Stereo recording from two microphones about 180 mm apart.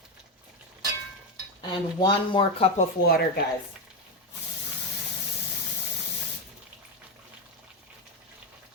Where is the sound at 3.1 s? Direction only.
60° left (ahead or behind).